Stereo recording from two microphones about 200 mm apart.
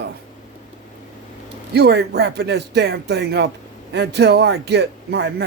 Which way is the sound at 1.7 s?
55° right (ahead or behind).